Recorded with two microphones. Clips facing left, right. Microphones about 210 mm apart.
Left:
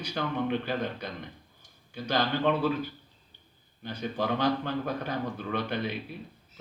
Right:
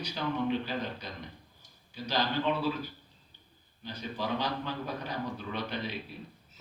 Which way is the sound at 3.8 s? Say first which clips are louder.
Left 4 dB; 55° left (ahead or behind).